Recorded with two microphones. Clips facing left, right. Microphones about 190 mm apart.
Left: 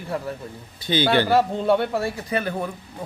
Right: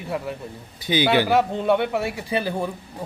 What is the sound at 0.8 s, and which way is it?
A man's voice, 15° right (ahead or behind).